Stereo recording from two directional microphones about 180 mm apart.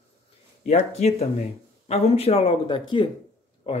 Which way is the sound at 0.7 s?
35° left (ahead or behind).